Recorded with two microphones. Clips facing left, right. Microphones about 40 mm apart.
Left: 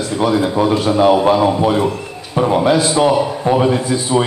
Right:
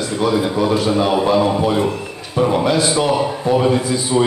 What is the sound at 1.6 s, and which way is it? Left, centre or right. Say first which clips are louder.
Speech: left 2 dB; centre.